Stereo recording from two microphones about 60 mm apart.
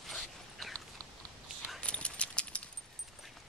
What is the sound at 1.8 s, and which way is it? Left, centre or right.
Dog, centre.